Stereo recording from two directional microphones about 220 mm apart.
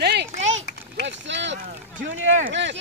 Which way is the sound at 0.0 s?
50° right (ahead or behind).